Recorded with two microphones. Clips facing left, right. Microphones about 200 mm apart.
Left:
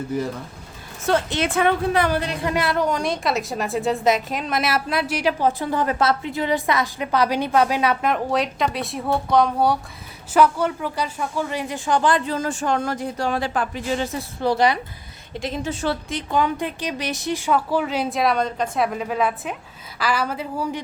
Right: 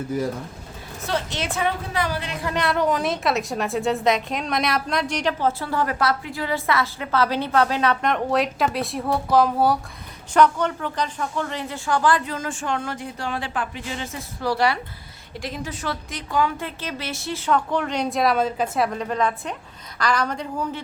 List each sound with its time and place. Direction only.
1.0 s a woman's voice: 50° left (ahead or behind)
2.6 s a woman's voice: centre (ahead or behind); by 14.3 s 35° left (ahead or behind)
14.4 s a woman's voice: 20° left (ahead or behind); by 18.9 s 5° right (ahead or behind)
18.9 s a woman's voice: 5° left (ahead or behind)